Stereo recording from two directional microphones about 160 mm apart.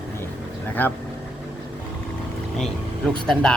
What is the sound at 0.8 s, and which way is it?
Speech, 10° left (ahead or behind).